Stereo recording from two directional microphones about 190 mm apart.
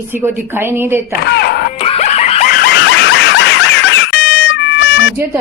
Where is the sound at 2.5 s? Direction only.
55° left (ahead or behind); by 4.0 s 70° left (ahead or behind).